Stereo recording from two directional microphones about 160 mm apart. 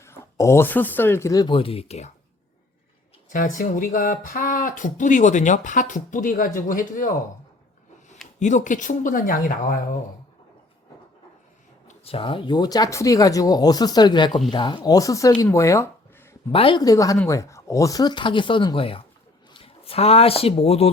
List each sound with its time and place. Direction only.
0.0 s speech: 15° left (ahead or behind); by 2.1 s 40° left (ahead or behind)
3.2 s speech: 55° left (ahead or behind)
8.4 s speech: 50° left (ahead or behind)
11.9 s speech: 35° left (ahead or behind); by 15.9 s 20° left (ahead or behind)
16.5 s speech: 30° left (ahead or behind)